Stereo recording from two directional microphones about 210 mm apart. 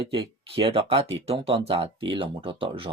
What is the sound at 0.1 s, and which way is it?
Speech, 25° right (ahead or behind).